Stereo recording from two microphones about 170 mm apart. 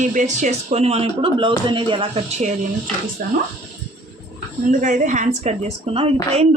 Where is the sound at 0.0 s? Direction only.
45° right (ahead or behind).